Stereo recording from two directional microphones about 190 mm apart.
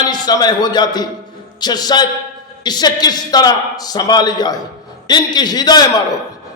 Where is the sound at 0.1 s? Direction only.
20° left (ahead or behind).